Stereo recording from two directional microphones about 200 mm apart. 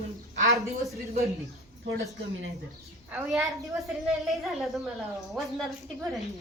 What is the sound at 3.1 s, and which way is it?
A woman's voice, 5° right (ahead or behind).